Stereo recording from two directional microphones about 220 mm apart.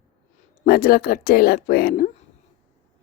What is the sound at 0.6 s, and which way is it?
A woman's voice, 45° left (ahead or behind).